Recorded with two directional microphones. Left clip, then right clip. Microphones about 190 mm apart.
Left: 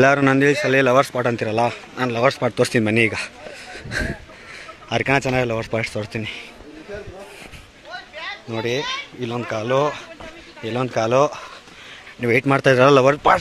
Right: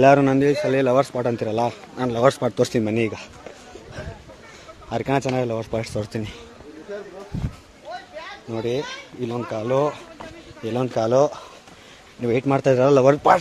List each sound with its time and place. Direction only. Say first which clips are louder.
0.0 s speech: right 1 dB; 10° left (ahead or behind)
0.3 s a man's voice: left 3 dB; centre (ahead or behind)
4.8 s a man's voice: left 4 dB; 5° left (ahead or behind)
5.9 s speech: left 2 dB; 15° right (ahead or behind)
8.5 s speech: left 2 dB; 5° right (ahead or behind)
12.2 s speech: left 3 dB; 5° left (ahead or behind)
13.0 s a man's voice: even; centre (ahead or behind)